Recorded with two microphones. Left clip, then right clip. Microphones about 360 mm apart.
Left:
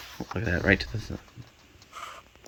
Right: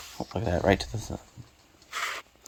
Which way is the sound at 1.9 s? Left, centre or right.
Right.